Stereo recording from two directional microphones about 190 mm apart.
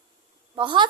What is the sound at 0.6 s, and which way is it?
Speech, 25° right (ahead or behind).